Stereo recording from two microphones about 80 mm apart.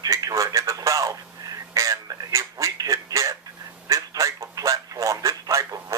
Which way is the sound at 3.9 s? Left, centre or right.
Right.